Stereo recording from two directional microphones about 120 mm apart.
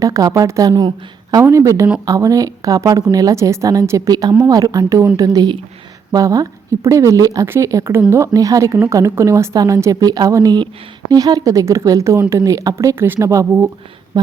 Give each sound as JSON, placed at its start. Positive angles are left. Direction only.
{"t": 0.0, "sound": "speech", "side_deg": -30}